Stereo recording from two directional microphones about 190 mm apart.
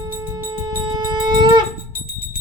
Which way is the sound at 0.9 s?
25° right (ahead or behind).